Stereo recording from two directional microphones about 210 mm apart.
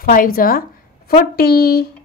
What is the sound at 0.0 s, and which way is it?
A woman's voice, 40° left (ahead or behind).